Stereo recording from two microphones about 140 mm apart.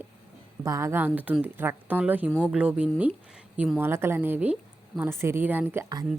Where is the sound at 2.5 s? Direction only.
10° right (ahead or behind).